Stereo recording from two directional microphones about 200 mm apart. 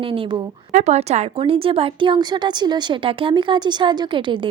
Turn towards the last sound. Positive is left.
turn(degrees=-25)  # may be behind; listen again after turning